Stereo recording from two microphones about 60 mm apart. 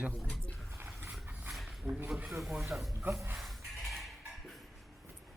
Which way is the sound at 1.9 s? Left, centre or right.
Right.